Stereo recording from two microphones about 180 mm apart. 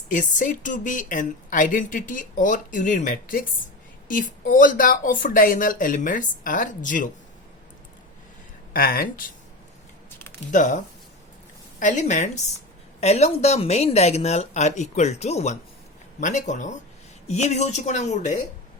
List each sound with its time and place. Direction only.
0.1 s a woman's voice: 45° left (ahead or behind)
8.7 s speech: 55° left (ahead or behind)
10.2 s a sound: 10° left (ahead or behind)
10.5 s a woman's voice: 45° left (ahead or behind)
11.8 s a woman's voice: 40° left (ahead or behind)